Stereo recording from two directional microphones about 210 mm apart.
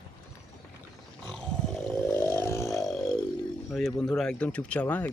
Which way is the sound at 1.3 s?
5° left (ahead or behind).